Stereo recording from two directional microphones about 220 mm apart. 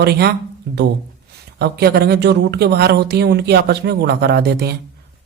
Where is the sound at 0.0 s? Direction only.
50° right (ahead or behind).